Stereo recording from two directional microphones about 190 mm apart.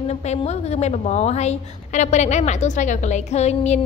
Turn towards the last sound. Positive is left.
turn(degrees=35)  # may be behind; listen again after turning